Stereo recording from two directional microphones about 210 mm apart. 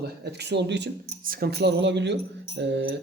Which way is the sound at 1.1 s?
45° right (ahead or behind).